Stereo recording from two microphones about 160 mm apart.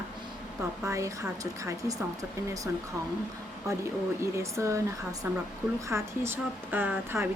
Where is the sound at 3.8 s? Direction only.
20° right (ahead or behind).